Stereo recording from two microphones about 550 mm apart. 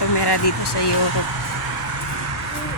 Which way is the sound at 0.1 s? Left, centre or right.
Left.